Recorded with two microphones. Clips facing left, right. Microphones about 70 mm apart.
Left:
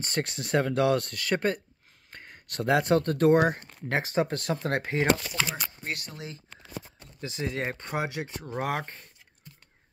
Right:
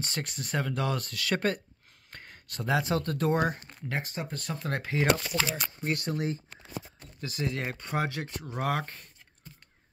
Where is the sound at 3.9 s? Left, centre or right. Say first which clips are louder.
Left 9 dB; left.